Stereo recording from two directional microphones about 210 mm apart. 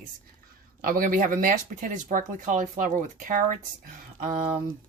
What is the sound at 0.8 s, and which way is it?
Speech, 40° right (ahead or behind).